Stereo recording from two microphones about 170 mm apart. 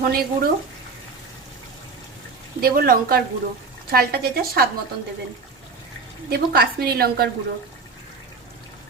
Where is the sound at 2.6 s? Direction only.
60° right (ahead or behind).